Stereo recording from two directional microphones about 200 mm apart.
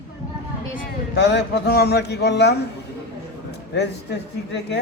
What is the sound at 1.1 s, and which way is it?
A man's voice, 60° left (ahead or behind).